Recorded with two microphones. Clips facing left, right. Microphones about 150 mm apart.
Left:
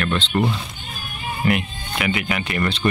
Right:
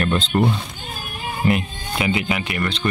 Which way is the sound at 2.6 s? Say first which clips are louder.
Left 3 dB; 5° left (ahead or behind).